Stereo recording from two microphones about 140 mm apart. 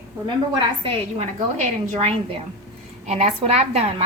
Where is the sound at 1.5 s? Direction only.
45° right (ahead or behind).